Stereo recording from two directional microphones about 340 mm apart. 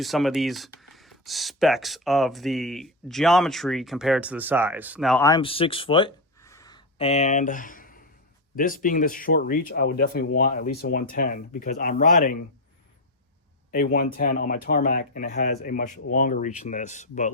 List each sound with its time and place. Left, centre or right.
0.0 s speech: centre; by 12.5 s left
13.7 s speech: left